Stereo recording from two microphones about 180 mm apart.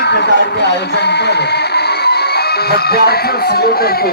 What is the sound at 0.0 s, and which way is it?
Speech, 70° left (ahead or behind).